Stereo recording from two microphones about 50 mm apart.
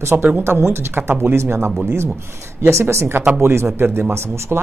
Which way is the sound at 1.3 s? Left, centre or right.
Right.